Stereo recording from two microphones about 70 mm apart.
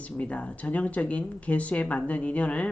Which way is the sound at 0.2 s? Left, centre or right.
Centre.